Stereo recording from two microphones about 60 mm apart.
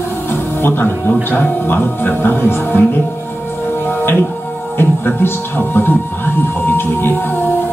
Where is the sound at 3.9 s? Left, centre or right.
Left.